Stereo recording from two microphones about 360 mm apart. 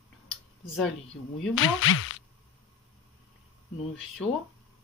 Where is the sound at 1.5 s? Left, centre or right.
Left.